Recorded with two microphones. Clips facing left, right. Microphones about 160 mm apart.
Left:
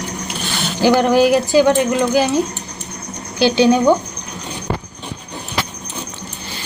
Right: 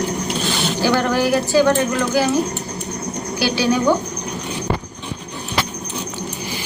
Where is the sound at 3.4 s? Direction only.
20° left (ahead or behind).